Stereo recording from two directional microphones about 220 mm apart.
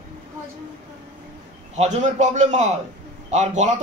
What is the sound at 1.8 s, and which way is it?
Speech, 30° right (ahead or behind).